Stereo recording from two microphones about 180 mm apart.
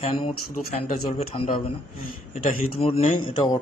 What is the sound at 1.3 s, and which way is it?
Speech, 30° left (ahead or behind).